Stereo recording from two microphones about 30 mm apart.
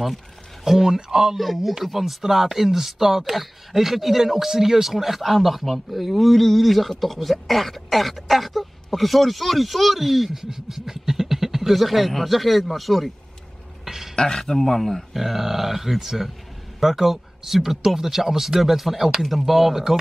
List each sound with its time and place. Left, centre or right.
0.7 s speech: centre
1.3 s speech: centre
13.8 s a sound: centre
14.1 s speech: left
15.1 s speech: centre